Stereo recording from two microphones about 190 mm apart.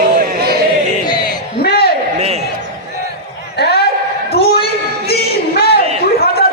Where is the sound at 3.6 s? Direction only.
60° left (ahead or behind).